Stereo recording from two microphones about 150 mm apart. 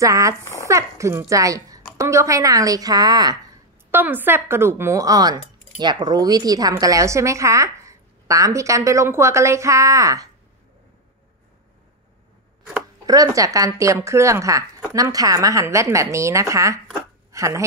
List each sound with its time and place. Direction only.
0.0 s a woman's voice: 20° right (ahead or behind)
3.9 s speech: 15° right (ahead or behind)
13.0 s speech: 25° right (ahead or behind)